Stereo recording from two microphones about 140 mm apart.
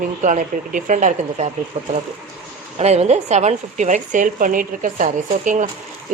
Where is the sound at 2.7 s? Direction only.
50° right (ahead or behind).